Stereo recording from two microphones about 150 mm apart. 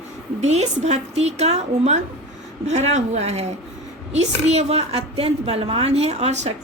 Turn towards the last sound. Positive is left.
turn(degrees=-50)  # may be behind; listen again after turning